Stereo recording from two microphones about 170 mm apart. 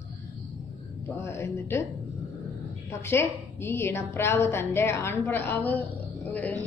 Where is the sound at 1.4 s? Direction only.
15° left (ahead or behind).